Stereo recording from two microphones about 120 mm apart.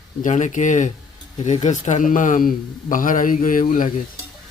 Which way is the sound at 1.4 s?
75° left (ahead or behind).